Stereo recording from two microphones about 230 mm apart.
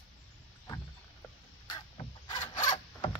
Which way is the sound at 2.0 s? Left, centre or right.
Centre.